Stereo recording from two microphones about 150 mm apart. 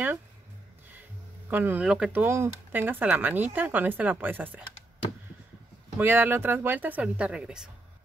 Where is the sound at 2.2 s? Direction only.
20° right (ahead or behind).